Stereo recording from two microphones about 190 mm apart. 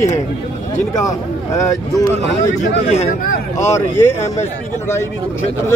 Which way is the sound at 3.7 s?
15° left (ahead or behind).